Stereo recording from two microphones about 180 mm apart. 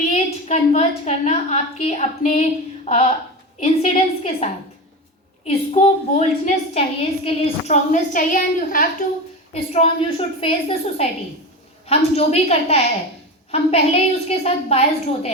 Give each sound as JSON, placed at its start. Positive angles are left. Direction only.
{"t": 0.1, "sound": "a woman's voice", "side_deg": 35}
{"t": 5.5, "sound": "a woman's voice", "side_deg": 35}
{"t": 9.5, "sound": "a woman's voice", "side_deg": 35}